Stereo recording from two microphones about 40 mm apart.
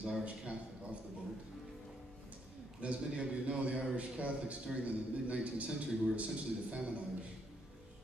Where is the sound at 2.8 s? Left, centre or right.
Right.